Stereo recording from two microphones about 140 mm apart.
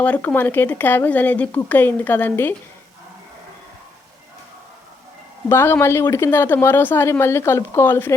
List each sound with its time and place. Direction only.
0.0 s speech: 10° left (ahead or behind)
5.5 s speech: 15° left (ahead or behind)